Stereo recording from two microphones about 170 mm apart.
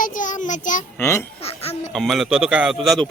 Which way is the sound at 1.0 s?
15° left (ahead or behind).